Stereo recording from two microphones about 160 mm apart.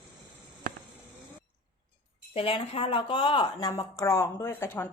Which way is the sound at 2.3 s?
35° left (ahead or behind).